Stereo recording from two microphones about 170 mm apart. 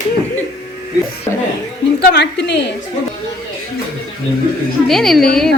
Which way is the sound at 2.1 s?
85° left.